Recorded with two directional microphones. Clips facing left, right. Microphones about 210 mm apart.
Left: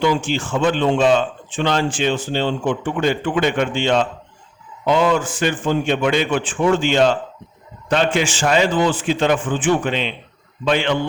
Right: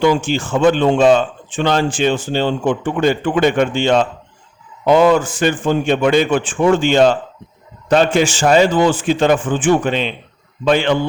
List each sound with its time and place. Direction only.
0.0 s a man's voice: 45° right (ahead or behind)